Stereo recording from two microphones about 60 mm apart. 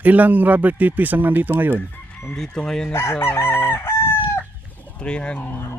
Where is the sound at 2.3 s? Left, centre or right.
Centre.